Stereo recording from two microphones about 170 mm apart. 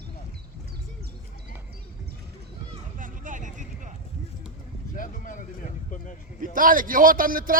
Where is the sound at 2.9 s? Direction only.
50° right (ahead or behind).